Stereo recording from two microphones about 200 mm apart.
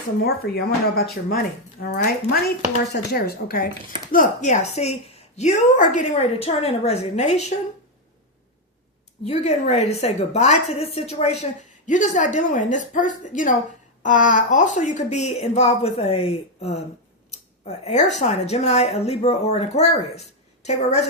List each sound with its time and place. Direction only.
0.2 s a woman's voice: 50° left (ahead or behind); by 7.4 s 35° left (ahead or behind)
9.2 s a woman's voice: 35° left (ahead or behind)